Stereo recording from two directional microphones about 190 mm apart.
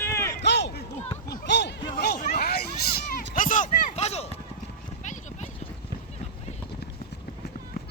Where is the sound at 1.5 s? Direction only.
65° left (ahead or behind); by 4.4 s 35° left (ahead or behind).